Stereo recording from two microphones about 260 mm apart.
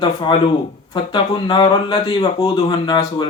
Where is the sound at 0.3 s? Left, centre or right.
Centre.